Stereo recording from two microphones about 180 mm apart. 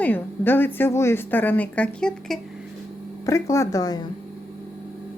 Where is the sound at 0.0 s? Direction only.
10° left (ahead or behind).